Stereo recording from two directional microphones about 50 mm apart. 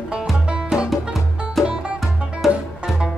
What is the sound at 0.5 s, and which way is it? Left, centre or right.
Music, centre.